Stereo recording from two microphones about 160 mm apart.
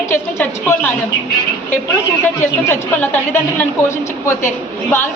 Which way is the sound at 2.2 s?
15° left (ahead or behind).